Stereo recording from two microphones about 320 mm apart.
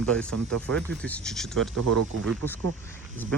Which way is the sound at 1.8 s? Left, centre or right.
Right.